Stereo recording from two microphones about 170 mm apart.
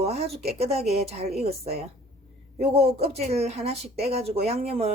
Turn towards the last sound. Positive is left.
turn(degrees=-40)  # may be behind; listen again after turning